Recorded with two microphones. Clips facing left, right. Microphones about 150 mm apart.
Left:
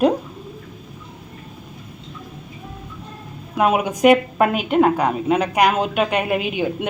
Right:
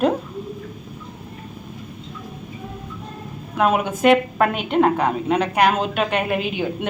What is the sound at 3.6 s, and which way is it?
A woman's voice, 10° left (ahead or behind).